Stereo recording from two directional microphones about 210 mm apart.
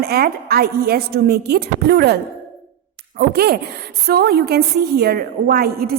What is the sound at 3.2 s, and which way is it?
A woman's voice, 45° right (ahead or behind).